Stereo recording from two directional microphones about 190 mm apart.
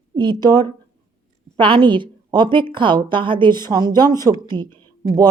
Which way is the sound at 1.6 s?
25° right (ahead or behind).